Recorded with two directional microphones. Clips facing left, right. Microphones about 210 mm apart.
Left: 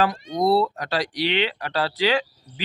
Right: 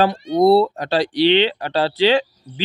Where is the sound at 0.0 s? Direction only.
30° right (ahead or behind).